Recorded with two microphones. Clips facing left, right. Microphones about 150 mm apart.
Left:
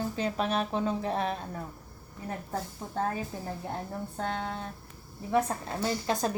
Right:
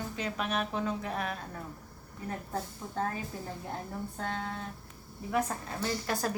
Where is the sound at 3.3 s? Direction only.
25° left (ahead or behind).